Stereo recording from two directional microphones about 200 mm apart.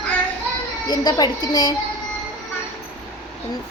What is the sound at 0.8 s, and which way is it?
Speech, 20° left (ahead or behind).